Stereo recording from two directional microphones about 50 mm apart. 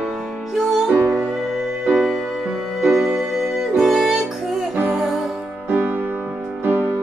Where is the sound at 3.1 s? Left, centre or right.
Centre.